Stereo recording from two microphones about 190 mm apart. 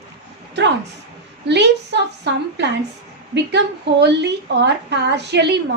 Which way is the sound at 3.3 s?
65° right (ahead or behind).